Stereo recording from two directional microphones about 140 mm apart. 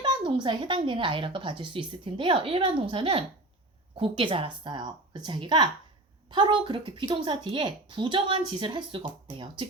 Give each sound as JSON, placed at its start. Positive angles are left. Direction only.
{"t": 0.0, "sound": "a woman's voice", "side_deg": -35}